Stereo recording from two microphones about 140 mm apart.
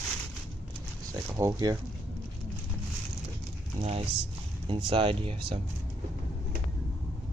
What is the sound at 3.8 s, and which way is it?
Speech, 45° right (ahead or behind).